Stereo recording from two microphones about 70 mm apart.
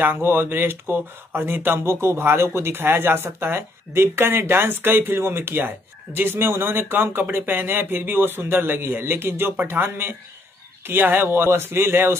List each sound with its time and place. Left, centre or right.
0.0 s speech: right